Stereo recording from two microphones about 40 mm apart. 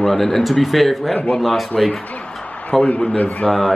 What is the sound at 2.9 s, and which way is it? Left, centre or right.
Speech, left.